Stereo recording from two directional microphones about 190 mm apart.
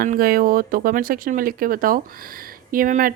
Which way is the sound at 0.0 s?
50° right (ahead or behind).